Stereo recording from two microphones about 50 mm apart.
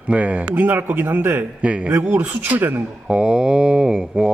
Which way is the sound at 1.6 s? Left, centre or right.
Right.